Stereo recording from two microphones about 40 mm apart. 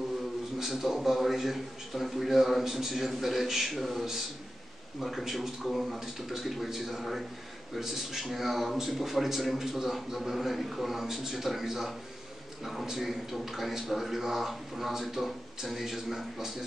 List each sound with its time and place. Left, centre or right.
0.6 s a man's voice: centre
5.2 s a man's voice: centre
5.6 s a man's voice: centre